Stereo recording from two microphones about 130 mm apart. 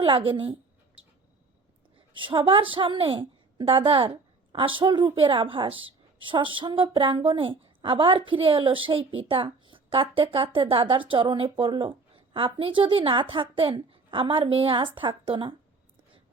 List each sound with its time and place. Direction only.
0.0 s a woman's voice: 45° right (ahead or behind)
2.1 s a woman's voice: 40° right (ahead or behind)